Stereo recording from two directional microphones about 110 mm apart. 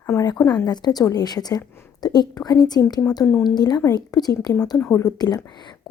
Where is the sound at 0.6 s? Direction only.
40° left (ahead or behind).